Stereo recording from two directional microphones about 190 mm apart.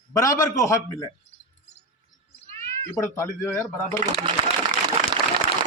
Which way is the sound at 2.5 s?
35° right (ahead or behind).